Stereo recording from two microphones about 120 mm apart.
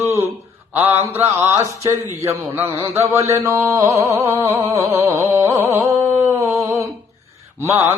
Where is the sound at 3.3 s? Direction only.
25° right (ahead or behind).